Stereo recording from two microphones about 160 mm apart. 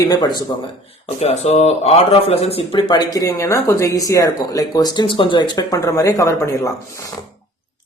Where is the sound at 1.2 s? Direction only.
40° left (ahead or behind).